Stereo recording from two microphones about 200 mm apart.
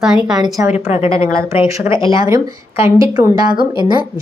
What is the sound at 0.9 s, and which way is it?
Speech, 30° left (ahead or behind).